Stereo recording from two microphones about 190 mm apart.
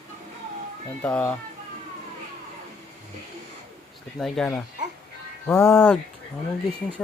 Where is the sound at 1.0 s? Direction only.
10° left (ahead or behind).